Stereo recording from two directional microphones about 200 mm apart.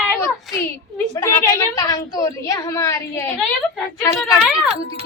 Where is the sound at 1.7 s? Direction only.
15° left (ahead or behind).